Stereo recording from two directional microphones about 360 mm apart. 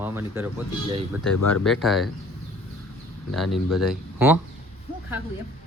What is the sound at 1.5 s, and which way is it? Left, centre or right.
Speech, centre.